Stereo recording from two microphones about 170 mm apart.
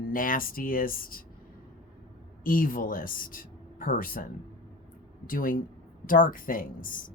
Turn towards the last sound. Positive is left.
turn(degrees=55)  # may be behind; listen again after turning